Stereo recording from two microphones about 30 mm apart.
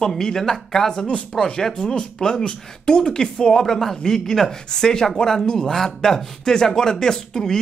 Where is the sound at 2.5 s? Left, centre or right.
Left.